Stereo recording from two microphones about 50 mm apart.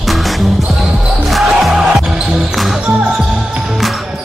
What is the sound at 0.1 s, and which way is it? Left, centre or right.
Music, centre.